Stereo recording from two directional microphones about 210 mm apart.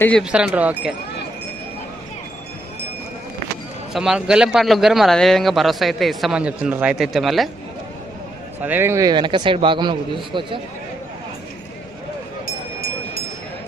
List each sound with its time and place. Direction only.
0.2 s a man's voice: 5° right (ahead or behind)
3.9 s a man's voice: 5° right (ahead or behind)
8.6 s a man's voice: 10° right (ahead or behind)